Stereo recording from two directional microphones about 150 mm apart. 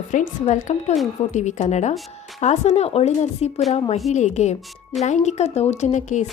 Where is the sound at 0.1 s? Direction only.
55° left (ahead or behind).